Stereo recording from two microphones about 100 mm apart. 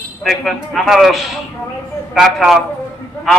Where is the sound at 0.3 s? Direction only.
Centre (ahead or behind).